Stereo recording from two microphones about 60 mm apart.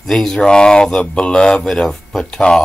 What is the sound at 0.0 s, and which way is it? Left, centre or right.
Speech, centre.